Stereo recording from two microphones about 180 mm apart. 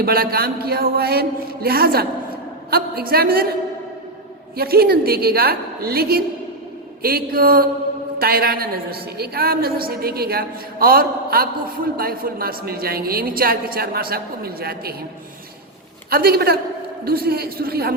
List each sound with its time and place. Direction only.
0.0 s a woman's voice: 55° right (ahead or behind)
4.5 s a woman's voice: 60° right (ahead or behind)
16.0 s a woman's voice: 55° right (ahead or behind)